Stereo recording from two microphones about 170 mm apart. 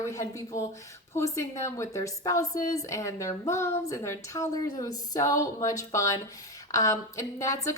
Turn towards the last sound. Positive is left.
turn(degrees=20)  # may be behind; listen again after turning